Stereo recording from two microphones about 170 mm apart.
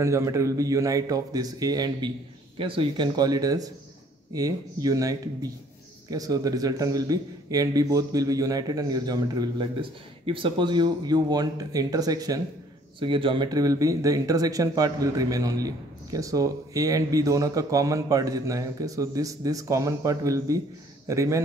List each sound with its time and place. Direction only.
0.0 s a man's voice: 15° right (ahead or behind)